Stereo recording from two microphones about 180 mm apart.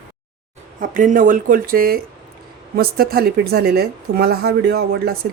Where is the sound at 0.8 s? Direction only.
45° right (ahead or behind).